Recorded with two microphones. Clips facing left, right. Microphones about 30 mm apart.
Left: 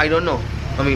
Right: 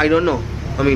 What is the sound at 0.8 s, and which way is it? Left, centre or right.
Speech, left.